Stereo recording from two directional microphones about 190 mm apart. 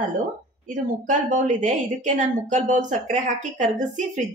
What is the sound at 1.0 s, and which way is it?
A woman's voice, 40° right (ahead or behind).